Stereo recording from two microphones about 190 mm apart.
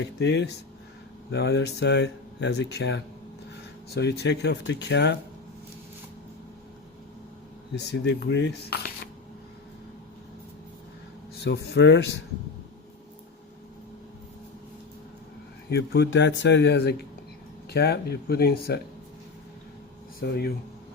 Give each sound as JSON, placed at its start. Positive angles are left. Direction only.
{"t": 0.0, "sound": "speech", "side_deg": 65}
{"t": 7.8, "sound": "speech", "side_deg": 65}
{"t": 11.4, "sound": "speech", "side_deg": 60}
{"t": 15.7, "sound": "speech", "side_deg": 65}
{"t": 20.2, "sound": "speech", "side_deg": 55}